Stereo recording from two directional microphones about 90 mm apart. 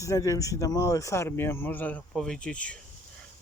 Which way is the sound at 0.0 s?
35° left (ahead or behind).